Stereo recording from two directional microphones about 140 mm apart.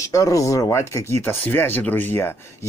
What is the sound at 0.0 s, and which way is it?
Speech, 25° left (ahead or behind).